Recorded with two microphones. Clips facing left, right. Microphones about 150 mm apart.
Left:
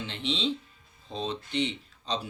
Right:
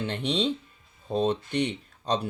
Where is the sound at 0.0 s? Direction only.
50° right (ahead or behind).